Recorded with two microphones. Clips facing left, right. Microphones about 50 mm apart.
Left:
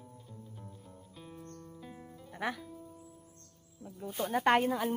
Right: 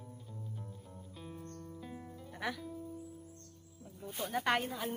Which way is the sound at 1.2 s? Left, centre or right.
Centre.